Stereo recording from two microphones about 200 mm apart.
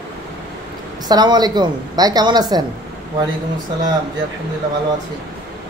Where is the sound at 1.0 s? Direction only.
20° right (ahead or behind).